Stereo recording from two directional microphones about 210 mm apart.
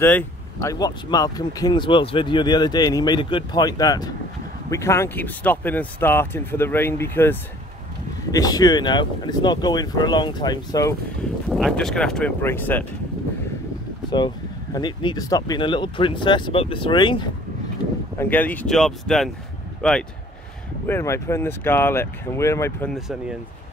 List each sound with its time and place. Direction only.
0.0 s speech: 10° left (ahead or behind)
11.4 s speech: centre (ahead or behind)
14.1 s speech: 20° left (ahead or behind)
18.1 s speech: 10° left (ahead or behind)
22.9 s speech: centre (ahead or behind)